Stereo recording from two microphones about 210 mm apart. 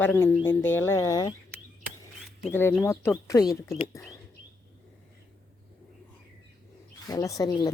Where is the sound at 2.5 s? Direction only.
10° left (ahead or behind).